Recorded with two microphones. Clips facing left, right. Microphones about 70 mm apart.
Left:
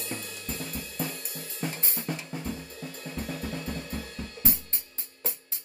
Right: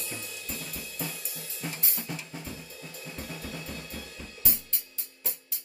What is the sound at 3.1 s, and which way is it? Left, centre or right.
Drum kit, left.